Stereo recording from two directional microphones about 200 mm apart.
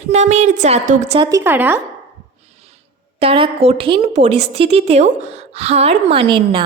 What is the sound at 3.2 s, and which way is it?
A woman's voice, 30° right (ahead or behind).